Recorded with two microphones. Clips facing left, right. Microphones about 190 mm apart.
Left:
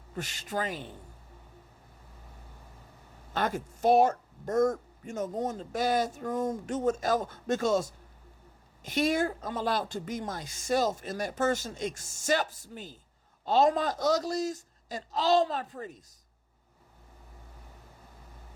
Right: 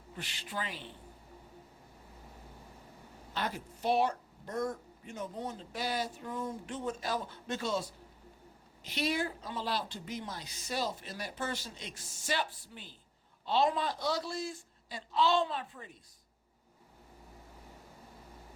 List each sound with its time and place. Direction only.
0.2 s speech: 45° left (ahead or behind)
3.3 s speech: 45° left (ahead or behind)